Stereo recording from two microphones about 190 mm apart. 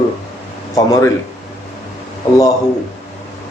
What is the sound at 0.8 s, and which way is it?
Speech, 20° left (ahead or behind).